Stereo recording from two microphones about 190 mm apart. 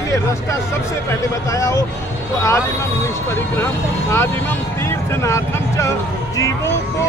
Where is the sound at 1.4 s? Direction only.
15° left (ahead or behind).